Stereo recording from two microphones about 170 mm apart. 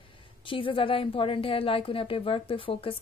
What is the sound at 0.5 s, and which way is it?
A woman's voice, 30° left (ahead or behind).